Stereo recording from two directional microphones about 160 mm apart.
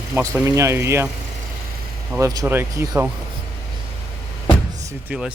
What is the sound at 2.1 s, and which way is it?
Speech, 20° right (ahead or behind).